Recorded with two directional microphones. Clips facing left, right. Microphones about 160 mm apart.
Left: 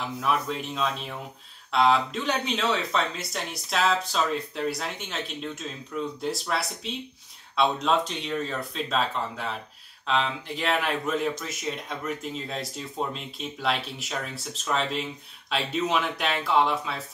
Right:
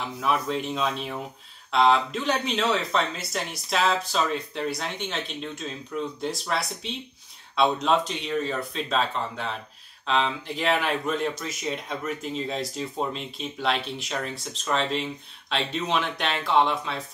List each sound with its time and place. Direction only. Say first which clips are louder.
0.2 s speech: right 2 dB; centre (ahead or behind)